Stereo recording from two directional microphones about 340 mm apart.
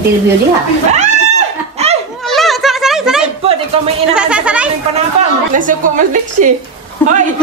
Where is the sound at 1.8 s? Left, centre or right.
Centre.